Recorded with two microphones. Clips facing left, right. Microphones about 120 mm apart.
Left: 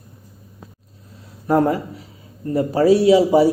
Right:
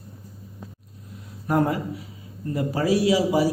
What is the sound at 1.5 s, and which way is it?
A man's voice, 35° left (ahead or behind).